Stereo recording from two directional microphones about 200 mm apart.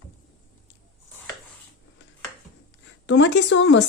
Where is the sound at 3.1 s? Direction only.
65° left (ahead or behind).